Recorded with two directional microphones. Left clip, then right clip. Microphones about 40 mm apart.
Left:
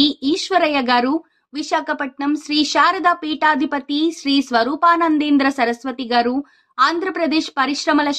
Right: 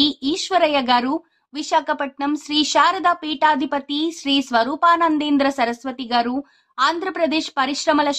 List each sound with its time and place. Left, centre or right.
0.0 s speech: left
1.6 s speech: centre
1.9 s speech: left
2.2 s a woman's voice: centre
2.8 s a woman's voice: left
6.8 s a woman's voice: centre
7.2 s speech: left